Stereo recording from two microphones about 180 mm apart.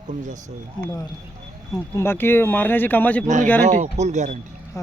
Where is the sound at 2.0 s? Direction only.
10° left (ahead or behind).